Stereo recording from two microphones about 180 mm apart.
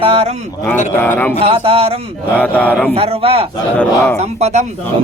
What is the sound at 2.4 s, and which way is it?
Speech, 10° left (ahead or behind).